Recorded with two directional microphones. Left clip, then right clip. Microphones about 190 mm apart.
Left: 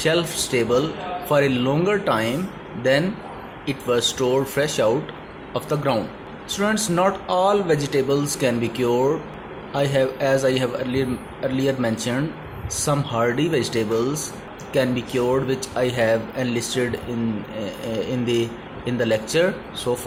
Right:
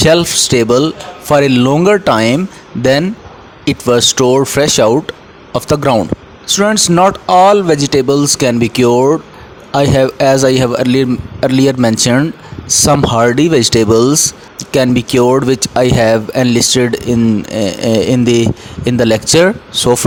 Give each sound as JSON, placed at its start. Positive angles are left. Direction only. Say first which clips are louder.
{"t": 0.0, "sound": "speech", "louder": "right 12 dB", "side_deg": -55}
{"t": 3.7, "sound": "speech", "louder": "right 11 dB", "side_deg": -55}